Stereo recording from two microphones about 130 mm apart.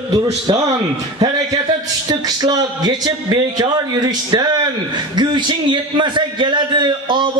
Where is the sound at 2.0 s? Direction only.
30° right (ahead or behind).